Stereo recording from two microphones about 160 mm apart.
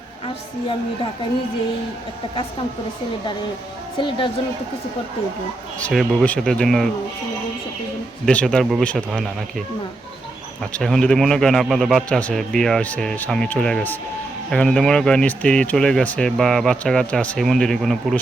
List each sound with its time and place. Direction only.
3.9 s speech: 30° left (ahead or behind)
5.8 s speech: centre (ahead or behind)
8.2 s speech: 5° left (ahead or behind)